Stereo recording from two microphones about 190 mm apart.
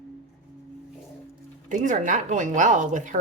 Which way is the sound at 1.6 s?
40° right (ahead or behind).